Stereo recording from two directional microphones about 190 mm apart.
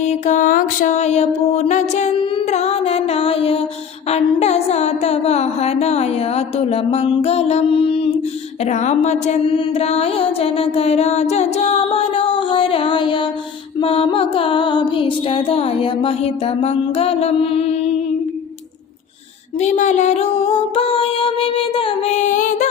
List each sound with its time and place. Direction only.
0.0 s speech: 35° left (ahead or behind)
1.5 s music: 35° left (ahead or behind)
4.1 s speech: 35° left (ahead or behind)
13.7 s music: 30° left (ahead or behind)
19.5 s speech: 35° left (ahead or behind)